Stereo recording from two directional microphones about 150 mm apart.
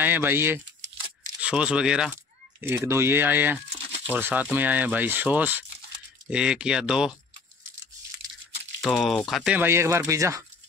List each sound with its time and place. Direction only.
0.0 s speech: 15° right (ahead or behind)
8.8 s speech: centre (ahead or behind)
9.6 s speech: 15° right (ahead or behind)